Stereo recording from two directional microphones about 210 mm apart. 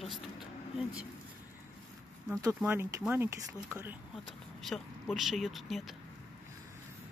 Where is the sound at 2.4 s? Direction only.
10° right (ahead or behind).